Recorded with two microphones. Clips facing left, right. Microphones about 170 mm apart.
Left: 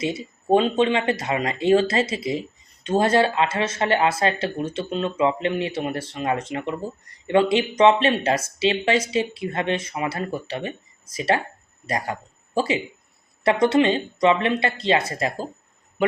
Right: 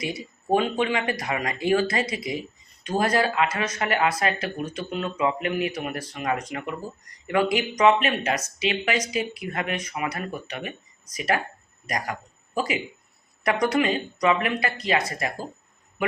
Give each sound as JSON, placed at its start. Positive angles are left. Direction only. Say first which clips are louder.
{"t": 0.0, "sound": "speech", "louder": "left 5 dB", "side_deg": 25}